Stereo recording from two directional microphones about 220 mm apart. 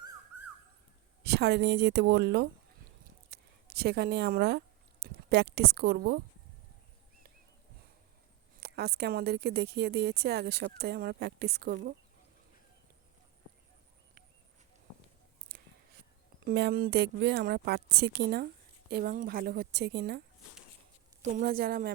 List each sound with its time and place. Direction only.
1.2 s a woman's voice: 50° right (ahead or behind)
3.2 s a sound: 45° right (ahead or behind)
8.6 s a woman's voice: 45° right (ahead or behind)
16.4 s a woman's voice: 45° right (ahead or behind)